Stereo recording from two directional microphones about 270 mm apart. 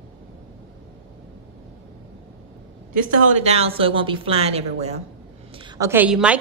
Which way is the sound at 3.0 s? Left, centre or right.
Right.